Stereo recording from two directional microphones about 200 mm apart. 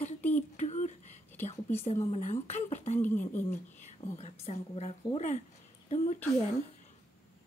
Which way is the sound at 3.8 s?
35° left (ahead or behind).